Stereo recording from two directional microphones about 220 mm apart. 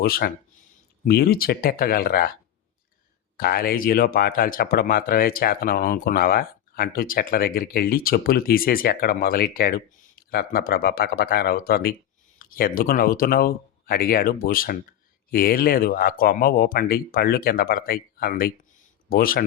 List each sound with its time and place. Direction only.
0.0 s speech: 45° left (ahead or behind)
3.3 s speech: 45° left (ahead or behind)